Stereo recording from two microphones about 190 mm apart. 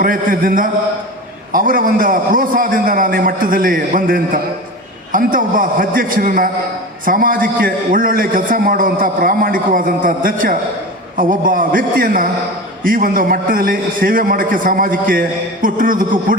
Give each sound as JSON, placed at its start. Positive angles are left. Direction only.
{"t": 0.0, "sound": "a man's voice", "side_deg": -50}